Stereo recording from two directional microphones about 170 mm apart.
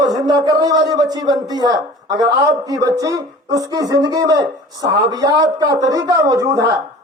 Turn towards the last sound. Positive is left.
turn(degrees=-20)  # may be behind; listen again after turning